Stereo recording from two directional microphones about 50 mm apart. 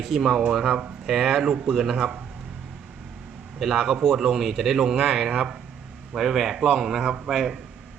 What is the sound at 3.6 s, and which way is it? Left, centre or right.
Speech, centre.